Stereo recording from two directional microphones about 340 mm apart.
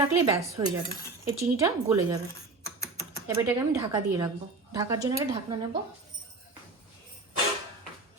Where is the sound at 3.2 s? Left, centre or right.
Centre.